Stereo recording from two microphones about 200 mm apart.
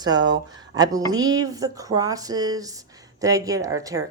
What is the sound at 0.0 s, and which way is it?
Speech, 20° right (ahead or behind).